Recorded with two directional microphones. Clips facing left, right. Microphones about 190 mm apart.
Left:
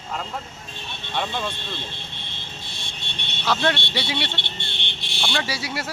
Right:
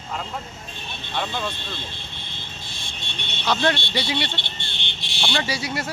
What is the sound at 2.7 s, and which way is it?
Vehicle, 65° left (ahead or behind).